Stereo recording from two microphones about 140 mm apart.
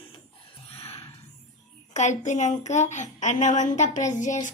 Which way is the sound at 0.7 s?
45° left (ahead or behind).